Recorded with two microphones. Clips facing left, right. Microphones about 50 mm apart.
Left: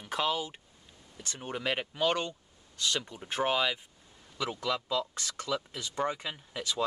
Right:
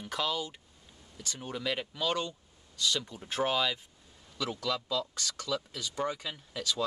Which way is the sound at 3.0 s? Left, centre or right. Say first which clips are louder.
Left 1 dB; left.